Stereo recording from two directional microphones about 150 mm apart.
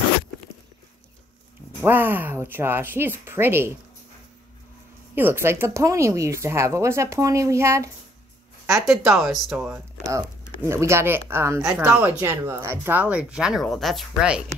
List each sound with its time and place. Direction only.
1.8 s speech: 15° right (ahead or behind)
5.1 s speech: 15° right (ahead or behind)
9.1 s speech: centre (ahead or behind)
9.7 s speech: 20° right (ahead or behind); by 14.4 s 5° right (ahead or behind)